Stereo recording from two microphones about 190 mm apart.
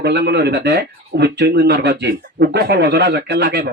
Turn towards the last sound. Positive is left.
turn(degrees=-60)  # may be behind; listen again after turning